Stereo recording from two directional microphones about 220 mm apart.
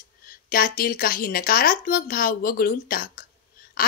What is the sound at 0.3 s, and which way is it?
A woman's voice, 40° left (ahead or behind).